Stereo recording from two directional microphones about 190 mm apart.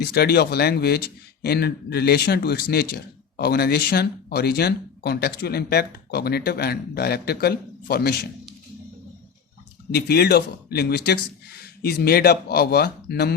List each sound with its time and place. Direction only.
0.0 s a man's voice: 60° left (ahead or behind)
9.9 s a man's voice: 55° left (ahead or behind)